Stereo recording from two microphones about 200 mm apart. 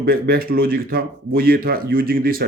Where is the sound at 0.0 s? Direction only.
50° right (ahead or behind).